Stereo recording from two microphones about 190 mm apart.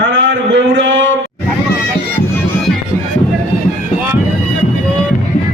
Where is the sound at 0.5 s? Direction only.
75° right (ahead or behind).